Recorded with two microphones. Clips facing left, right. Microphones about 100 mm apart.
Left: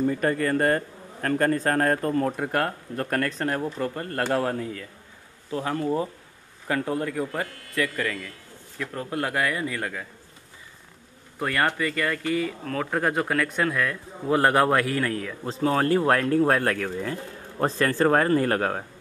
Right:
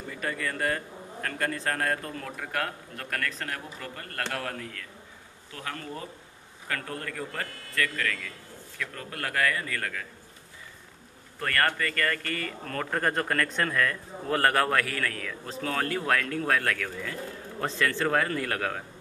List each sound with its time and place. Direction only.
0.0 s a man's voice: 40° left (ahead or behind); by 10.0 s 20° left (ahead or behind)
11.3 s speech: 15° left (ahead or behind); by 18.9 s 40° left (ahead or behind)